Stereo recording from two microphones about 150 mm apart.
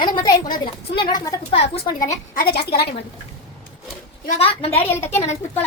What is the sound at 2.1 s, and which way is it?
Speech, 80° left.